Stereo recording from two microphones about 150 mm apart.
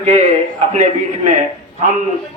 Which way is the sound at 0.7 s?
60° right (ahead or behind).